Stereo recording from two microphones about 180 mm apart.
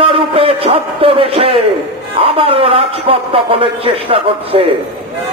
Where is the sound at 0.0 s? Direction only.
30° right (ahead or behind).